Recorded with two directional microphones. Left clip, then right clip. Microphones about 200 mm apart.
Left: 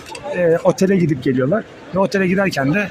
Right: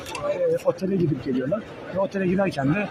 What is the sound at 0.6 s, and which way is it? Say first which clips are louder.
Speech: left 8 dB; 25° left (ahead or behind).